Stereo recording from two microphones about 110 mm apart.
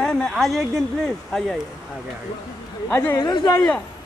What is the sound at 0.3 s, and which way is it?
Speech, centre (ahead or behind).